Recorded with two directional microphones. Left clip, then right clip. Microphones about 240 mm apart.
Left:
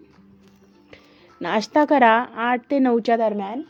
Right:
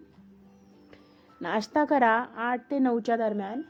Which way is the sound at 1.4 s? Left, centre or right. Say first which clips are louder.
Left 7 dB; centre.